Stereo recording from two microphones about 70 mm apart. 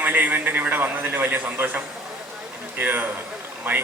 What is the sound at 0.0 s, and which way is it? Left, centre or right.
A man's voice, right.